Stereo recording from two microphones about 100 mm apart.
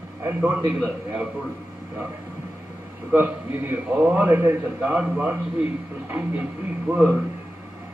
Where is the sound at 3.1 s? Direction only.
20° right (ahead or behind).